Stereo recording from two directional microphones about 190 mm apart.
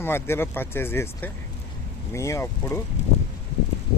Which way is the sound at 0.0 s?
10° left (ahead or behind).